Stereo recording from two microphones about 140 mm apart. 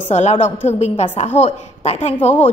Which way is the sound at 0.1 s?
55° left (ahead or behind).